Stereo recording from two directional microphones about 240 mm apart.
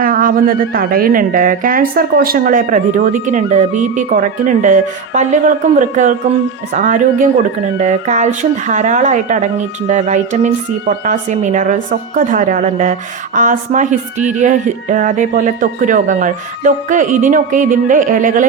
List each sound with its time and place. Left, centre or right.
0.0 s speech: right